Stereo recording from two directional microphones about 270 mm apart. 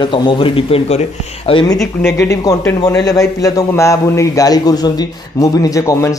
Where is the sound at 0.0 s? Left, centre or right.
Centre.